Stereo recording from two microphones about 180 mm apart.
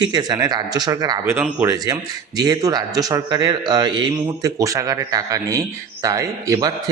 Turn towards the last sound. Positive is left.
turn(degrees=-20)  # may be behind; listen again after turning